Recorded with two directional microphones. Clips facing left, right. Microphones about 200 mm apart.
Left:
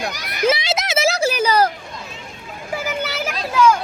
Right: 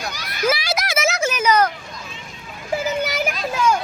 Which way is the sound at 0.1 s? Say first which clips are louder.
Left 1 dB; 20° left (ahead or behind).